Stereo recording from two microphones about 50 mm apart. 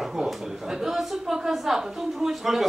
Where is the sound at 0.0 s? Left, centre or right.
Centre.